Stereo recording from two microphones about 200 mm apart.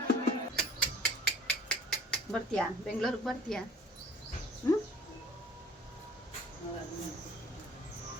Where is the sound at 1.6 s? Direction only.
5° left (ahead or behind).